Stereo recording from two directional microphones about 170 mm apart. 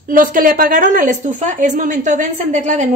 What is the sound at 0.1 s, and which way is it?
A woman's voice, 55° right (ahead or behind).